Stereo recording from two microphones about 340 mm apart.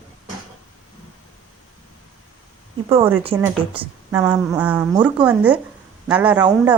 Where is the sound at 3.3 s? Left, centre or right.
Centre.